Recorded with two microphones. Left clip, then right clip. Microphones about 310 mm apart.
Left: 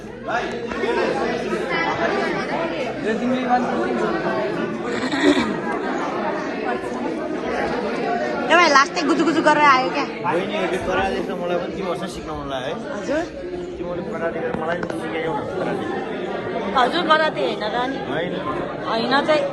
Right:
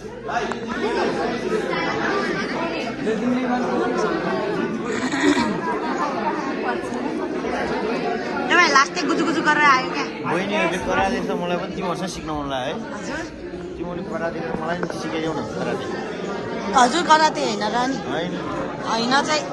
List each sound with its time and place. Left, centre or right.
5.1 s chatter: centre
8.4 s a woman's voice: centre
11.1 s a man's voice: right
16.7 s speech: centre
18.9 s speech: centre